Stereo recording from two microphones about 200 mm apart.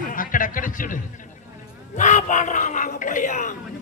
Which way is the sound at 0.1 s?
40° left (ahead or behind).